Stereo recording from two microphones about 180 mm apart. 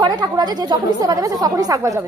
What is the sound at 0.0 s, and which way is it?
A woman's voice, 25° right (ahead or behind).